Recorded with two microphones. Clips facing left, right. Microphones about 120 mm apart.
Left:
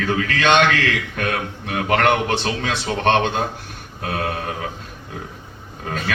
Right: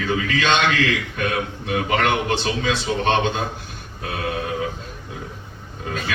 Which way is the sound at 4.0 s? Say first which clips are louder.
Left 3 dB; 50° left (ahead or behind).